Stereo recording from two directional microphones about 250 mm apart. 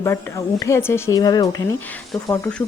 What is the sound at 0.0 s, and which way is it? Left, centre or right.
Speech, centre.